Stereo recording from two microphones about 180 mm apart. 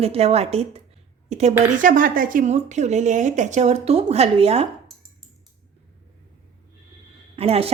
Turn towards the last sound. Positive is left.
turn(degrees=-35)  # may be behind; listen again after turning